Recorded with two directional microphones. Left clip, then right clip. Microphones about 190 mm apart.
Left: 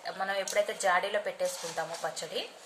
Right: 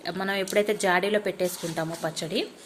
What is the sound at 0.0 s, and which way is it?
A woman's voice, 45° right (ahead or behind).